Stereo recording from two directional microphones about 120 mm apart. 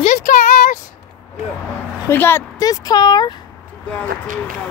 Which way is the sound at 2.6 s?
30° left (ahead or behind).